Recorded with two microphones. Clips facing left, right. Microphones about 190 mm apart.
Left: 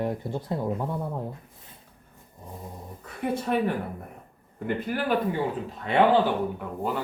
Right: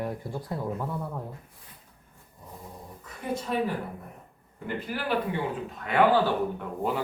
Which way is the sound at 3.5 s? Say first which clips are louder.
Left 2 dB; 60° left (ahead or behind).